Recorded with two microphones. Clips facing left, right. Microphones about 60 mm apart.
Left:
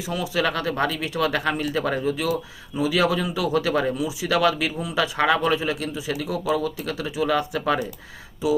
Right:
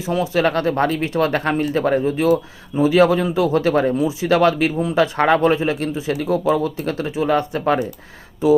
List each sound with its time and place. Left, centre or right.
0.0 s speech: right